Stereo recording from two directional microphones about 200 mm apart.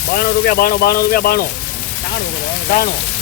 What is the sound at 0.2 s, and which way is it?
Speech, 50° left (ahead or behind).